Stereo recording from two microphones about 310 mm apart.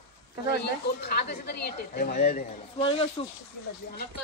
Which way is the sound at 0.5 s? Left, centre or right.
Left.